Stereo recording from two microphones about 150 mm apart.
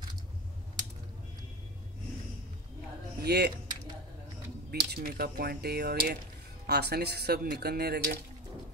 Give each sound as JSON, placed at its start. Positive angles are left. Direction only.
{"t": 3.3, "sound": "speech", "side_deg": -90}
{"t": 4.6, "sound": "speech", "side_deg": -85}